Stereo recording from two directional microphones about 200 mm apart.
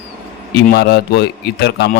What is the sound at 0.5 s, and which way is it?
A man's voice, 55° left (ahead or behind).